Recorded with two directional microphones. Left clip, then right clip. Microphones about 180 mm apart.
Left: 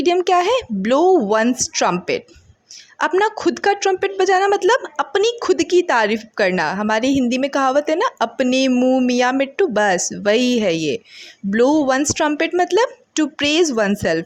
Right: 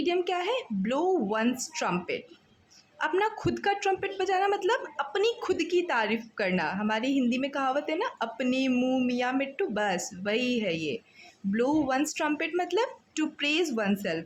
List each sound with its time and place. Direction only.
0.0 s a woman's voice: 45° left (ahead or behind)
8.7 s a sound: 30° left (ahead or behind)
9.0 s a woman's voice: 45° left (ahead or behind)